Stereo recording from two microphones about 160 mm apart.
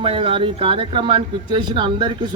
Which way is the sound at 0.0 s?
35° right (ahead or behind).